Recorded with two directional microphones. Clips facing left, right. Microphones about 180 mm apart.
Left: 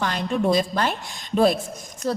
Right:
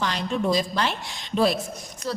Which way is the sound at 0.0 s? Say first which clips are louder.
Left 2 dB; 50° left (ahead or behind).